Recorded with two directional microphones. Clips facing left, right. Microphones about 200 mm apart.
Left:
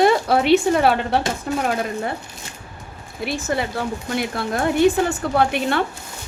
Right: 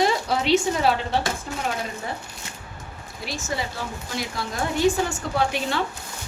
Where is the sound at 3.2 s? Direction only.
60° left (ahead or behind).